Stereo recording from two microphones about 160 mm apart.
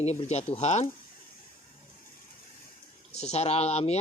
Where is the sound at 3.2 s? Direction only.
40° left (ahead or behind).